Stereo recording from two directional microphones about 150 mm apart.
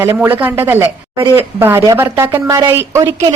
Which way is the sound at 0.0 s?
15° right (ahead or behind).